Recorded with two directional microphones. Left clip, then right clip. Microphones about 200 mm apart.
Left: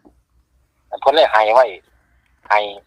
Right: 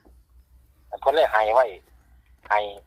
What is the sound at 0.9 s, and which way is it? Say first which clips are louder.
Speech: left 7 dB; 30° left (ahead or behind).